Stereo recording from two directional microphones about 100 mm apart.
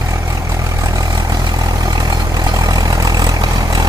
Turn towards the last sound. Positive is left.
turn(degrees=-40)  # may be behind; listen again after turning